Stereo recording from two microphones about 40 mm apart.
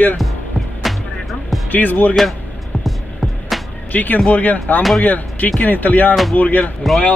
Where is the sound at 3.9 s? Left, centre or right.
Left.